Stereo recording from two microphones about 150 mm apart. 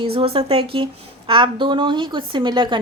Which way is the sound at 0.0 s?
40° right (ahead or behind).